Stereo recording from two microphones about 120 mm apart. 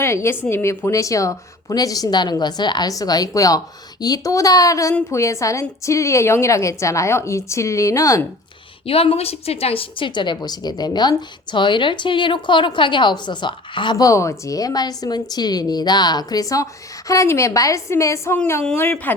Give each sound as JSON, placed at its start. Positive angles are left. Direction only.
{"t": 0.0, "sound": "a woman's voice", "side_deg": 20}
{"t": 8.9, "sound": "a woman's voice", "side_deg": 55}
{"t": 13.9, "sound": "a woman's voice", "side_deg": 25}